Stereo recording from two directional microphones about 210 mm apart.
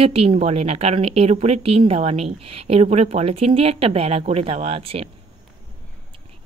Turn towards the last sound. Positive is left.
turn(degrees=-25)  # may be behind; listen again after turning